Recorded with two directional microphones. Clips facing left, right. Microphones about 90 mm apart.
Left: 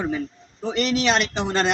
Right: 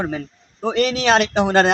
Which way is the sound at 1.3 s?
75° right (ahead or behind).